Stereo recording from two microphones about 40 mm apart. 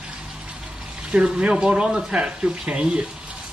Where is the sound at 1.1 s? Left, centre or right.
Right.